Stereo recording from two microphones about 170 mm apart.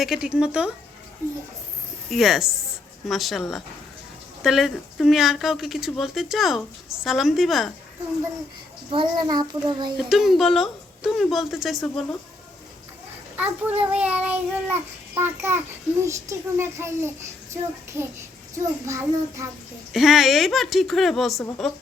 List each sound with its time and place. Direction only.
0.0 s speech: 5° right (ahead or behind)
1.2 s child singing: 15° right (ahead or behind)
2.0 s speech: centre (ahead or behind)
8.9 s child singing: 25° right (ahead or behind)
10.0 s speech: centre (ahead or behind)
13.3 s child singing: 10° right (ahead or behind)
19.9 s speech: centre (ahead or behind)